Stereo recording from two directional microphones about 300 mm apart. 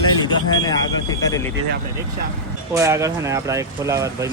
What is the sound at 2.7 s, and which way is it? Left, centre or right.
Speech, centre.